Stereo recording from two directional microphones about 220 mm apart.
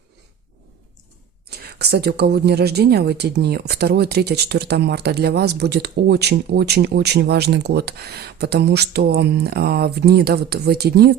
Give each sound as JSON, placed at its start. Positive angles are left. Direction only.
{"t": 1.5, "sound": "speech", "side_deg": -45}